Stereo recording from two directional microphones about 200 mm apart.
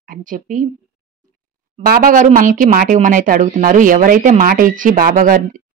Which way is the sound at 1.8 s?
45° right (ahead or behind).